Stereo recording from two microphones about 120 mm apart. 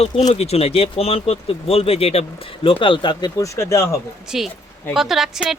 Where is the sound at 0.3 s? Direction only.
60° left (ahead or behind).